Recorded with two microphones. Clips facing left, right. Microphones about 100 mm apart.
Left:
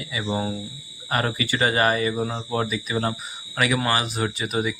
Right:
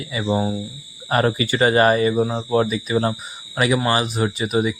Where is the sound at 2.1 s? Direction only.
20° right (ahead or behind).